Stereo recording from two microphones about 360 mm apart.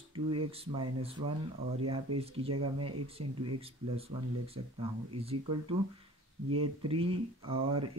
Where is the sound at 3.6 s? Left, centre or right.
Centre.